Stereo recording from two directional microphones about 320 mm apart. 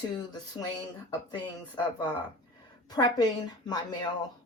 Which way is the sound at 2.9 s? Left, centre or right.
Centre.